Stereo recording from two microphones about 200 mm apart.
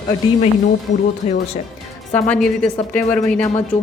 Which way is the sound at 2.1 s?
5° left (ahead or behind).